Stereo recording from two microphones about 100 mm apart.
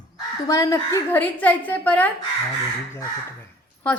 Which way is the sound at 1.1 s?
15° left (ahead or behind).